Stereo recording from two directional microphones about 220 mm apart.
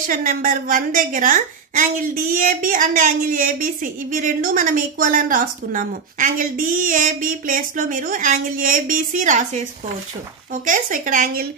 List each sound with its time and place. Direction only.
0.0 s a woman's voice: 35° right (ahead or behind)
10.6 s a woman's voice: 35° right (ahead or behind)